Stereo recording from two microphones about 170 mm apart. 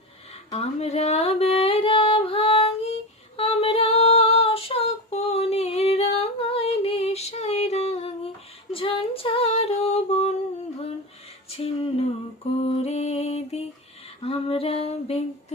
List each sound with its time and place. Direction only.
0.5 s music: 40° left (ahead or behind)
8.7 s female singing: 30° left (ahead or behind)
11.5 s music: 35° left (ahead or behind)
14.2 s female singing: 35° left (ahead or behind)